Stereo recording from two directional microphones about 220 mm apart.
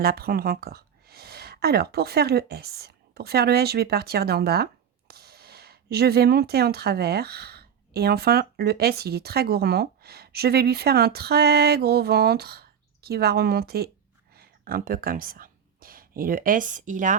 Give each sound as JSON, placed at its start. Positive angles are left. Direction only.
{"t": 0.0, "sound": "speech", "side_deg": -45}